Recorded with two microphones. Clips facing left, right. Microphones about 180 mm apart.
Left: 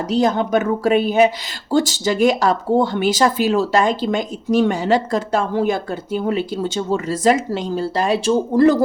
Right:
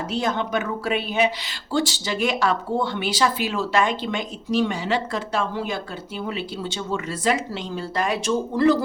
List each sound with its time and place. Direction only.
0.1 s speech: 40° left (ahead or behind)
7.9 s speech: 30° left (ahead or behind)